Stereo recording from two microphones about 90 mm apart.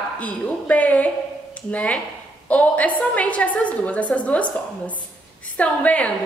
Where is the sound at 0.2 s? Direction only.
15° left (ahead or behind).